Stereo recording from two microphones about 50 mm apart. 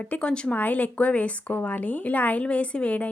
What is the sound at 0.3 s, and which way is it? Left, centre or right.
Speech, centre.